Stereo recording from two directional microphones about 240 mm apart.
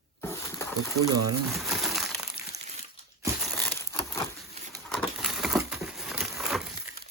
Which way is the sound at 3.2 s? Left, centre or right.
Centre.